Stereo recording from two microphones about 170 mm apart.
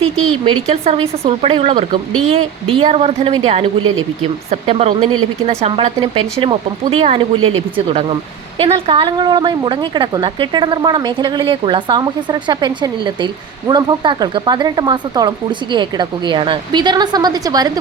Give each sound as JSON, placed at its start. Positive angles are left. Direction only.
{"t": 0.4, "sound": "a woman's voice", "side_deg": -30}